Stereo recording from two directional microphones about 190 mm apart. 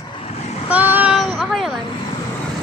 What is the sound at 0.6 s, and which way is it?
Child singing, 10° right (ahead or behind).